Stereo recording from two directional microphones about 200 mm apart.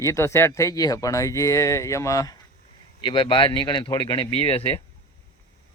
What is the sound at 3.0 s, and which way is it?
Speech, 25° left (ahead or behind).